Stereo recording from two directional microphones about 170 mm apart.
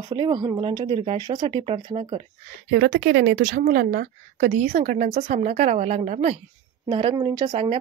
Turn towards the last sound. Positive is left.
turn(degrees=-35)  # may be behind; listen again after turning